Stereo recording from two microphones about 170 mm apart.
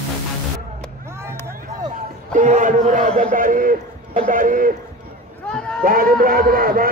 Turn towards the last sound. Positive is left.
turn(degrees=-55)  # may be behind; listen again after turning